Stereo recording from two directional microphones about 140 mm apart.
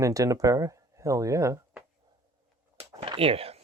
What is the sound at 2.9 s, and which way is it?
Speech, 40° right (ahead or behind).